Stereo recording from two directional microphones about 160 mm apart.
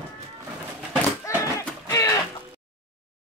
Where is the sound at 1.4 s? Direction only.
20° left (ahead or behind).